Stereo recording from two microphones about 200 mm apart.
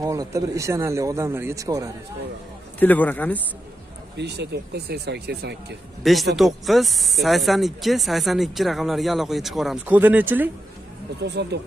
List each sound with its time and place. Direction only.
0.0 s speech: 15° right (ahead or behind)
2.8 s speech: 10° left (ahead or behind)
4.2 s speech: 55° right (ahead or behind)
6.3 s speech: centre (ahead or behind)
11.1 s speech: 55° right (ahead or behind)